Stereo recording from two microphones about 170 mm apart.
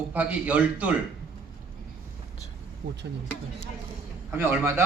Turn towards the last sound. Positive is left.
turn(degrees=-15)  # may be behind; listen again after turning